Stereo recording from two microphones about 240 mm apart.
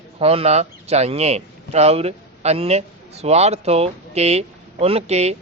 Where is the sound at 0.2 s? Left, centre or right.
Right.